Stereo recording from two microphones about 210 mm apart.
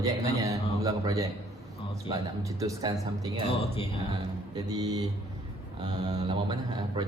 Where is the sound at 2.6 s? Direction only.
15° right (ahead or behind).